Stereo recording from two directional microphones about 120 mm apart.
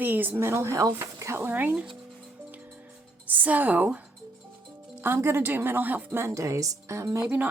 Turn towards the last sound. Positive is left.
turn(degrees=-15)  # may be behind; listen again after turning